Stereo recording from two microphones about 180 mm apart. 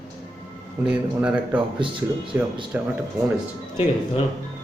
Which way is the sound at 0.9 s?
5° right (ahead or behind).